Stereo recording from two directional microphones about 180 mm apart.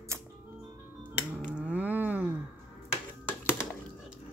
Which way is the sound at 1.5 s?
5° right (ahead or behind).